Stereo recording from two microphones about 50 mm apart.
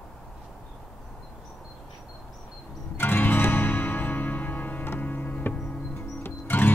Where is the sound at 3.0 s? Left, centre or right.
Left.